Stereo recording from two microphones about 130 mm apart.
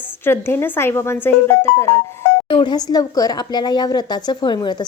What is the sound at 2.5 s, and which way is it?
Speech, 35° left (ahead or behind).